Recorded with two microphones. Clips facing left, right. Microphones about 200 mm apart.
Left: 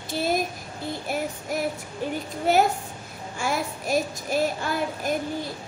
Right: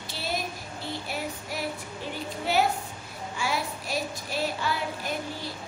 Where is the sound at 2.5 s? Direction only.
50° left (ahead or behind).